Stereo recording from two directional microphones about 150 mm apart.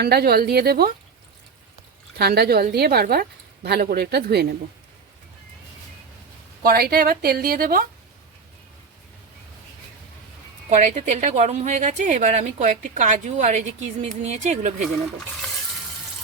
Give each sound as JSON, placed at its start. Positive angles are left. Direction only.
{"t": 0.0, "sound": "a woman's voice", "side_deg": -90}
{"t": 2.1, "sound": "a woman's voice", "side_deg": -90}
{"t": 6.6, "sound": "speech", "side_deg": -85}
{"t": 10.7, "sound": "a woman's voice", "side_deg": -50}